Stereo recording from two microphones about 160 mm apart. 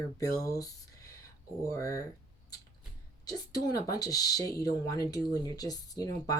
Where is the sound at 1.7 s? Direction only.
20° left (ahead or behind).